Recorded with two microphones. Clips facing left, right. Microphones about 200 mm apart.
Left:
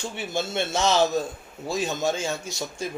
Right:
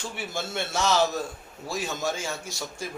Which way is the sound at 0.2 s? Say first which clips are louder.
Left 5 dB; 20° left (ahead or behind).